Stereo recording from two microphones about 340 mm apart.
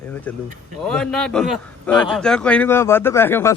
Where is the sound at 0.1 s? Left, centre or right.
Centre.